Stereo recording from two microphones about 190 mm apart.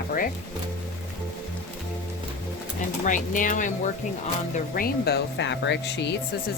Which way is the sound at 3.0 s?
45° left (ahead or behind).